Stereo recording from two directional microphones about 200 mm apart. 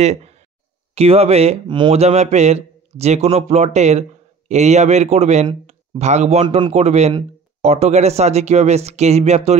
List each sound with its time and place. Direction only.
0.0 s speech: 35° right (ahead or behind)